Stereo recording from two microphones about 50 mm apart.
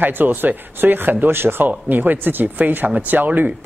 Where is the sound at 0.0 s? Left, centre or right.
Right.